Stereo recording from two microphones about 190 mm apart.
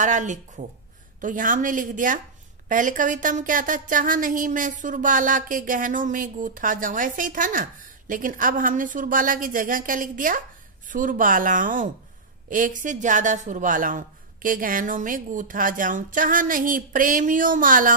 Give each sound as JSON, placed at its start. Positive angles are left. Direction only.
{"t": 0.0, "sound": "speech", "side_deg": -40}